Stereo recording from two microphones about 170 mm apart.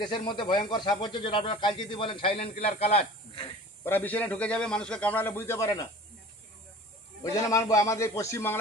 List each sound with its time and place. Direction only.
0.0 s speech: 25° left (ahead or behind)
3.8 s a man's voice: 10° left (ahead or behind)
7.4 s a man's voice: 20° left (ahead or behind)